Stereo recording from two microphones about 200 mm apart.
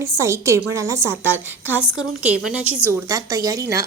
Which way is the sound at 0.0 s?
15° right (ahead or behind).